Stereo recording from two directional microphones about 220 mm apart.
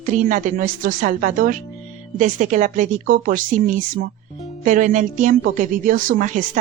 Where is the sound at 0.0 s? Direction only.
35° right (ahead or behind).